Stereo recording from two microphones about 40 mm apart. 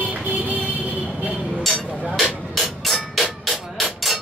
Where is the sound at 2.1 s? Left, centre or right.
Centre.